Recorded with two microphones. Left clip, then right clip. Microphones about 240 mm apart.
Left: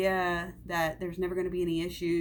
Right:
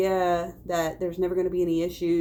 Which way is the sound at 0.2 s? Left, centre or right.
Left.